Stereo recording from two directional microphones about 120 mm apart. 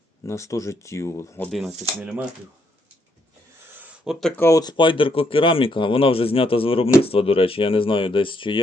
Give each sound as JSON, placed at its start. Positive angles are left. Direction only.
{"t": 0.3, "sound": "speech", "side_deg": 25}
{"t": 1.5, "sound": "speech", "side_deg": 0}
{"t": 3.8, "sound": "a sound", "side_deg": -10}
{"t": 4.4, "sound": "speech", "side_deg": 25}
{"t": 4.6, "sound": "speech", "side_deg": 45}